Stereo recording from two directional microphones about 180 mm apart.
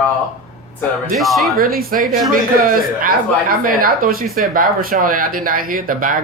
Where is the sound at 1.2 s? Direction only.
Centre (ahead or behind).